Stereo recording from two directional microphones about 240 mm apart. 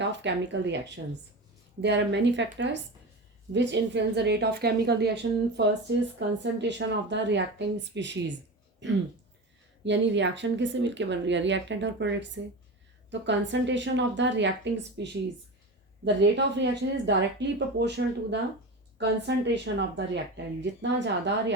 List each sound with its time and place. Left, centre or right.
0.0 s speech: right
1.8 s speech: right
9.8 s speech: right